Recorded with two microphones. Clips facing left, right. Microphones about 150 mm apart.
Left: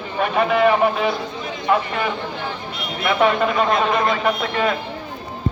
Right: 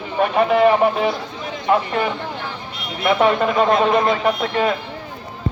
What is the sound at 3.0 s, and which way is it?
Speech, 35° right (ahead or behind).